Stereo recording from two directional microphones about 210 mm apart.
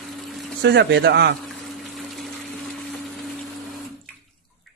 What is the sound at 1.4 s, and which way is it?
Water, centre (ahead or behind).